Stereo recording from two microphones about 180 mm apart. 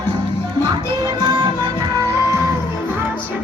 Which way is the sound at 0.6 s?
25° right (ahead or behind).